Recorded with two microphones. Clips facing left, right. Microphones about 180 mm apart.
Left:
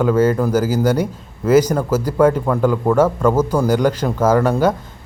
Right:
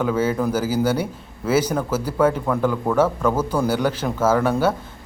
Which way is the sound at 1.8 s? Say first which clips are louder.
Left 5 dB; 10° left (ahead or behind).